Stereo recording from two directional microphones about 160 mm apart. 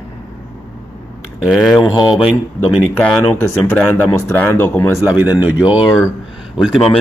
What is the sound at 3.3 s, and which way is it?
Speech, 15° left (ahead or behind).